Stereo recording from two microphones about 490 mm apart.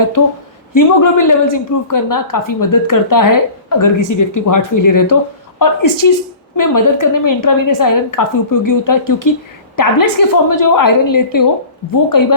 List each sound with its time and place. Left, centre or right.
0.2 s a woman's voice: left